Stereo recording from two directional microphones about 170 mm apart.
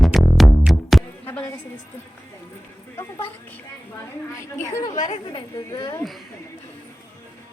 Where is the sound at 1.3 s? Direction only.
10° left (ahead or behind).